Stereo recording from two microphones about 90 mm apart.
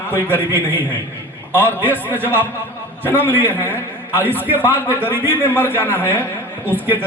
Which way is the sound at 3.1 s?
20° right (ahead or behind).